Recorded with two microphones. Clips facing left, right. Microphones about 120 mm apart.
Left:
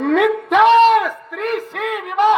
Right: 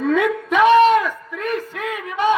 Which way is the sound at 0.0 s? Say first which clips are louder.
Left 3 dB; 75° left (ahead or behind).